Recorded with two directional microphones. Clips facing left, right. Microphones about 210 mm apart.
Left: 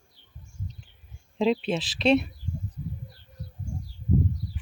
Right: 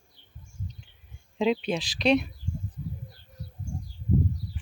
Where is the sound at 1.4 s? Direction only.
Centre (ahead or behind).